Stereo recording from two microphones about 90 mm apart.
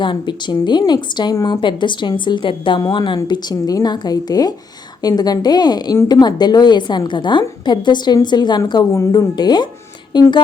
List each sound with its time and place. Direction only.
0.0 s a woman's voice: 60° left (ahead or behind)
3.2 s a woman's voice: 50° left (ahead or behind)